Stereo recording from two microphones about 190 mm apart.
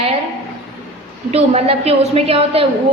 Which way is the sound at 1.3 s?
30° right (ahead or behind).